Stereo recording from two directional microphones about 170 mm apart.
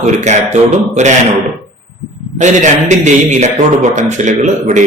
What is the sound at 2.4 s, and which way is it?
A man's voice, 45° right (ahead or behind).